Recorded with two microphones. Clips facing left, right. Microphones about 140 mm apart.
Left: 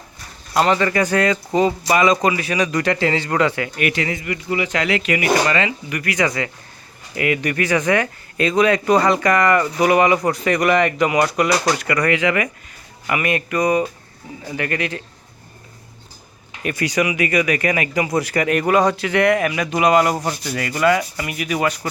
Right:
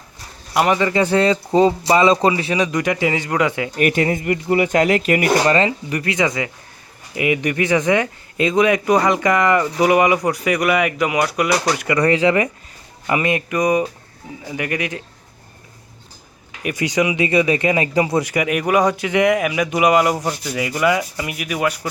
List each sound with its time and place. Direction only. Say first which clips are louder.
0.5 s speech: even; 15° right (ahead or behind)
1.0 s speech: right 2 dB; 25° right (ahead or behind)
3.8 s speech: right 4 dB; 45° right (ahead or behind); by 11.4 s 5° right (ahead or behind)
11.8 s speech: right 3 dB; 25° right (ahead or behind)
16.6 s speech: right 1 dB; 15° right (ahead or behind)